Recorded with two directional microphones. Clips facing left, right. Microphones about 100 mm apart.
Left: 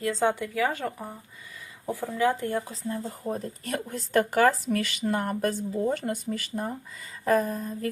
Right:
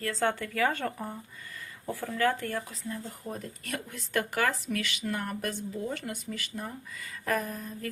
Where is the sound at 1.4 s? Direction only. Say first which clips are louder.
Left 5 dB; 15° left (ahead or behind).